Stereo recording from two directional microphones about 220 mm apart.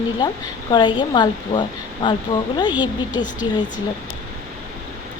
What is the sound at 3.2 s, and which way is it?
Speech, 20° left (ahead or behind).